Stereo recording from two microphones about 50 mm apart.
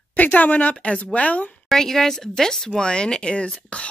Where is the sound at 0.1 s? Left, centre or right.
Left.